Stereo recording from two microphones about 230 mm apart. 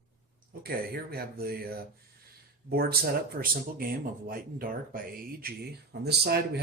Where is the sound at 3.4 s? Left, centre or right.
Right.